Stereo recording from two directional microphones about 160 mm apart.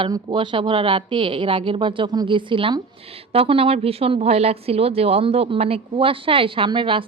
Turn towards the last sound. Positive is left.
turn(degrees=-30)  # may be behind; listen again after turning